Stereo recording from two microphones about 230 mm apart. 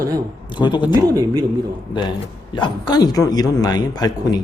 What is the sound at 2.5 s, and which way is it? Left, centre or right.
A man's voice, centre.